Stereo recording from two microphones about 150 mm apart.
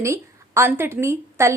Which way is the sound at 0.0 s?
20° right (ahead or behind).